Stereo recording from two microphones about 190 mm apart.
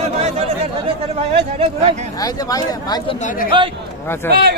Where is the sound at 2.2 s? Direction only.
20° left (ahead or behind).